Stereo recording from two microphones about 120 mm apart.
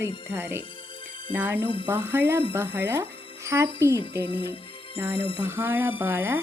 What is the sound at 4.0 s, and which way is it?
Speech, 45° left (ahead or behind).